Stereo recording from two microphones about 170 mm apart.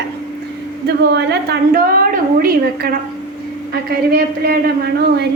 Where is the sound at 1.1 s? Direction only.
75° right (ahead or behind).